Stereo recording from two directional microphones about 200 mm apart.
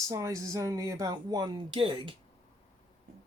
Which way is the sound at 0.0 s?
15° right (ahead or behind).